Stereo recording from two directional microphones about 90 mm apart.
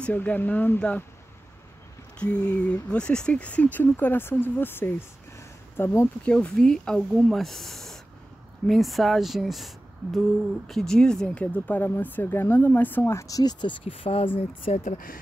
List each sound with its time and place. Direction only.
0.0 s speech: 20° left (ahead or behind)
2.5 s speech: 15° left (ahead or behind)
6.2 s speech: 10° left (ahead or behind)
10.7 s speech: 5° left (ahead or behind); by 13.7 s 50° left (ahead or behind)
13.8 s speech: 90° left